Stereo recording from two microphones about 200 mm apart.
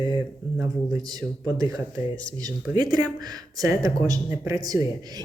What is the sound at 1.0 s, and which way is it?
Speech, 20° right (ahead or behind).